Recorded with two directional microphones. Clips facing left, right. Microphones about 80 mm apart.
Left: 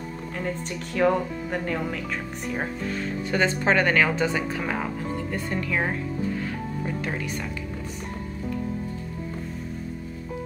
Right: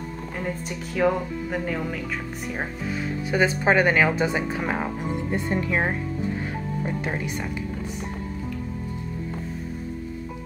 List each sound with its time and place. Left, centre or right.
0.4 s speech: centre; by 5.9 s right
7.0 s speech: centre